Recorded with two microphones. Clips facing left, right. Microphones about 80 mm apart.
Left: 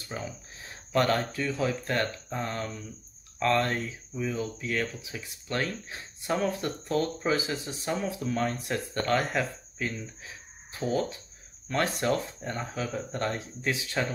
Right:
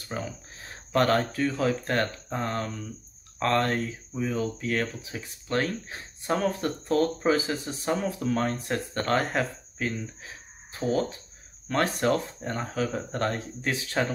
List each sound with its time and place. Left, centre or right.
0.1 s speech: right